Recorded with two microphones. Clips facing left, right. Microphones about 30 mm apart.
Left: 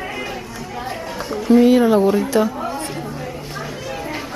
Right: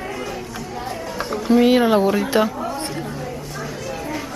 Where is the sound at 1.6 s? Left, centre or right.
Right.